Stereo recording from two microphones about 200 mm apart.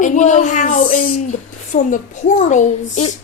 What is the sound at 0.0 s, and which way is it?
A child's voice, 40° left (ahead or behind).